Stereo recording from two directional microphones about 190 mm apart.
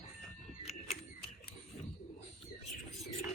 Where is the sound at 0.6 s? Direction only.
35° left (ahead or behind).